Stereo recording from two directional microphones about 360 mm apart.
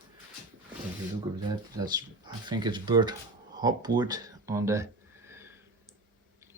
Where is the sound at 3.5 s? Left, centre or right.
Centre.